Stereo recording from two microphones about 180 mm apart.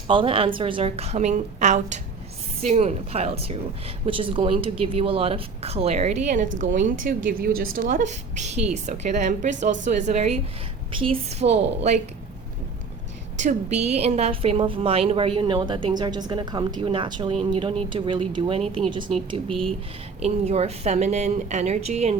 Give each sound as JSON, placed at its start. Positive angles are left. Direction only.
{"t": 0.1, "sound": "speech", "side_deg": -30}
{"t": 13.4, "sound": "a woman's voice", "side_deg": -40}